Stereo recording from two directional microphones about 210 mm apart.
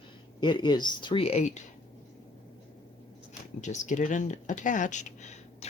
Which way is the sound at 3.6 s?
35° left (ahead or behind).